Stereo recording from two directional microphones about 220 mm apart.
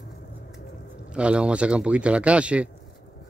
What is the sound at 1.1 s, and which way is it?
Speech, 5° right (ahead or behind).